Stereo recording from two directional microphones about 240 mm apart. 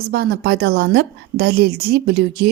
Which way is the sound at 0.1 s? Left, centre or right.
Right.